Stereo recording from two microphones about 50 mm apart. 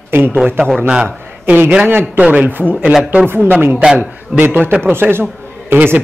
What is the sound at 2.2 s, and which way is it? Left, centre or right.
Speech, right.